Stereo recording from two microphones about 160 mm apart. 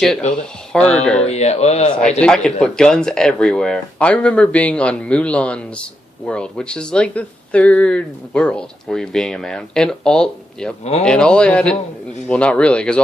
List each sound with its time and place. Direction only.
0.7 s speech: 5° left (ahead or behind)
1.3 s speech: 40° left (ahead or behind)
2.0 s a man's voice: 5° left (ahead or behind)